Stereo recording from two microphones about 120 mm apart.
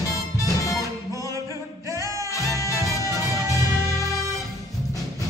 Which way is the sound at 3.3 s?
25° right (ahead or behind).